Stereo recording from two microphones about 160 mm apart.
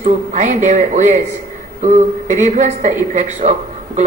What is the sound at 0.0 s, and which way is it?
A woman's voice, 50° right (ahead or behind).